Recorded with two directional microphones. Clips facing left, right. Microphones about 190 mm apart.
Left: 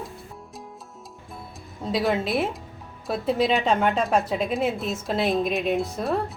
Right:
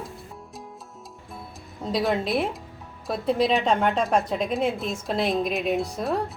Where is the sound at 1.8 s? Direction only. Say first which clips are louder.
Left 1 dB; centre (ahead or behind).